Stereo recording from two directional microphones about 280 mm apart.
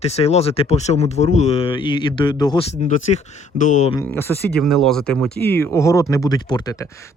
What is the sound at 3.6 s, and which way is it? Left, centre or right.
Speech, left.